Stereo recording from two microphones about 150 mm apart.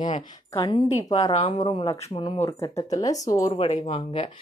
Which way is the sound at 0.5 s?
25° left (ahead or behind).